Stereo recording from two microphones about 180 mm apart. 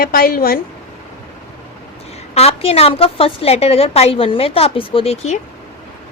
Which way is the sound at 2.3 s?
35° left (ahead or behind).